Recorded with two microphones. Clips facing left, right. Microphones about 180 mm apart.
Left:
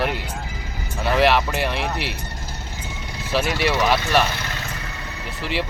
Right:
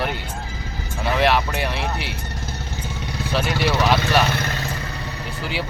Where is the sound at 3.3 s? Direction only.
Centre (ahead or behind).